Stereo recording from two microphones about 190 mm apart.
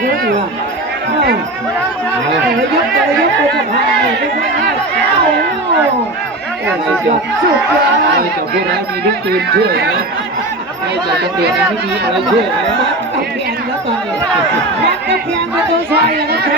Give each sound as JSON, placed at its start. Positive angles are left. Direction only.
{"t": 0.0, "sound": "a sound", "side_deg": -55}
{"t": 8.1, "sound": "speech", "side_deg": -60}
{"t": 11.1, "sound": "speech", "side_deg": -60}
{"t": 15.9, "sound": "speech", "side_deg": -55}